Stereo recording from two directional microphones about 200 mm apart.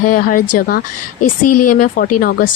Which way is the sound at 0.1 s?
45° left (ahead or behind).